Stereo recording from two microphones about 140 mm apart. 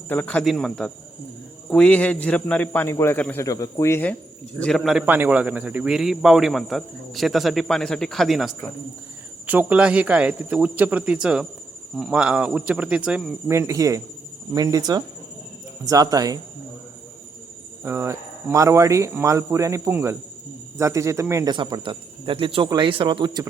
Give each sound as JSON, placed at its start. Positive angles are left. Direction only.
{"t": 0.1, "sound": "a man's voice", "side_deg": 10}
{"t": 3.4, "sound": "speech", "side_deg": 25}
{"t": 4.6, "sound": "speech", "side_deg": 0}
{"t": 5.0, "sound": "speech", "side_deg": -15}
{"t": 13.5, "sound": "speech", "side_deg": -20}
{"t": 17.8, "sound": "speech", "side_deg": -20}
{"t": 21.5, "sound": "speech", "side_deg": -35}